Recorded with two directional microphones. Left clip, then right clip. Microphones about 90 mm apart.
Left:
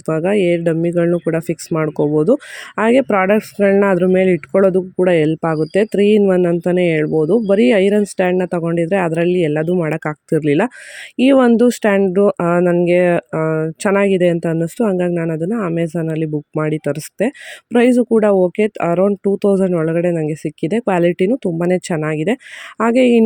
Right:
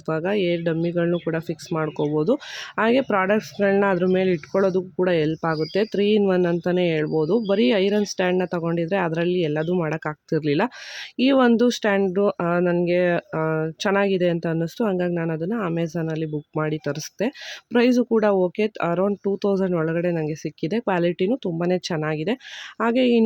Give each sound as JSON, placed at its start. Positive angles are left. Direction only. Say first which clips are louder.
{"t": 0.1, "sound": "speech", "louder": "left 7 dB", "side_deg": 30}
{"t": 1.3, "sound": "speech", "louder": "left 8 dB", "side_deg": 40}
{"t": 7.5, "sound": "speech", "louder": "left 8 dB", "side_deg": 30}
{"t": 13.8, "sound": "speech", "louder": "left 7 dB", "side_deg": 30}
{"t": 15.5, "sound": "speech", "louder": "left 6 dB", "side_deg": 15}
{"t": 18.5, "sound": "speech", "louder": "left 7 dB", "side_deg": 35}
{"t": 18.9, "sound": "speech", "louder": "left 8 dB", "side_deg": 20}
{"t": 19.4, "sound": "speech", "louder": "left 8 dB", "side_deg": 35}
{"t": 19.8, "sound": "speech", "louder": "left 7 dB", "side_deg": 20}
{"t": 20.3, "sound": "speech", "louder": "left 7 dB", "side_deg": 30}
{"t": 21.9, "sound": "speech", "louder": "left 6 dB", "side_deg": 20}
{"t": 22.9, "sound": "speech", "louder": "left 7 dB", "side_deg": 35}